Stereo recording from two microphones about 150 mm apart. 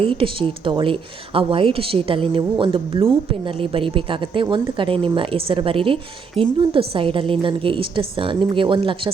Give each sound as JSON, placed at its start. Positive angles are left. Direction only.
{"t": 0.0, "sound": "speech", "side_deg": -35}